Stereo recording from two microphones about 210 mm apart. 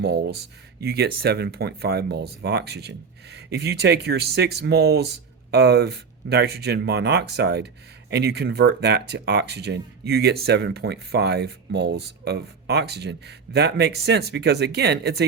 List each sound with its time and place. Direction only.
0.0 s speech: 50° right (ahead or behind)